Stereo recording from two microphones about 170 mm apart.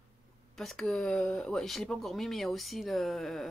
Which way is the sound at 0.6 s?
5° left (ahead or behind).